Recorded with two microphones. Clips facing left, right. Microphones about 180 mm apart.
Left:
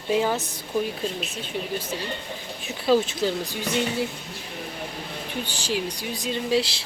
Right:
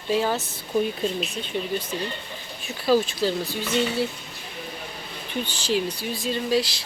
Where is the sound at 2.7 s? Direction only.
20° left (ahead or behind).